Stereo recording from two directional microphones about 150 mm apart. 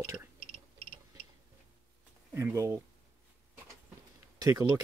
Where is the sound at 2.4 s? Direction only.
20° right (ahead or behind).